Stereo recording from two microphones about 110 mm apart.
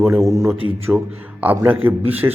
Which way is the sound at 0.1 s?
30° right (ahead or behind).